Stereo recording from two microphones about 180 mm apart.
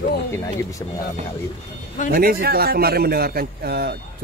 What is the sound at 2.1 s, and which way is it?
A man's voice, 55° right (ahead or behind).